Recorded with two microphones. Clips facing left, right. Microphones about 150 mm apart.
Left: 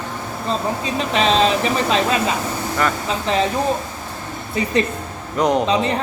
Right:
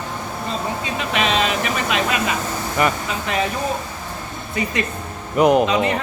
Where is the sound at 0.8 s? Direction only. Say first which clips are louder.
Left 4 dB; 30° left (ahead or behind).